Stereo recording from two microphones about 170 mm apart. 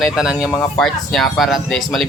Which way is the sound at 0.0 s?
5° right (ahead or behind).